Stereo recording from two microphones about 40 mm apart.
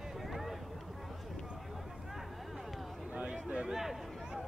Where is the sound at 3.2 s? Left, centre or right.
Right.